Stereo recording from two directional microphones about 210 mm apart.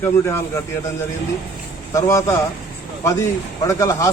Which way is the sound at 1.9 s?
15° left (ahead or behind).